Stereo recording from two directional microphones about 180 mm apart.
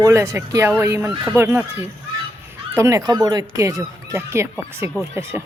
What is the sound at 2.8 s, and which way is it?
Speech, 15° right (ahead or behind).